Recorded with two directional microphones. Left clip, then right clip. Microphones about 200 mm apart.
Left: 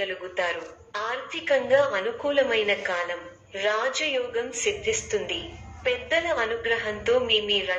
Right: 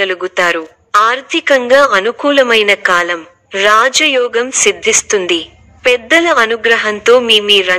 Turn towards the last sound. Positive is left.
turn(degrees=-50)  # may be behind; listen again after turning